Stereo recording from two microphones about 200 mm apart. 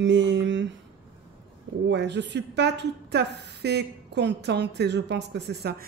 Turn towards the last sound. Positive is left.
turn(degrees=-55)  # may be behind; listen again after turning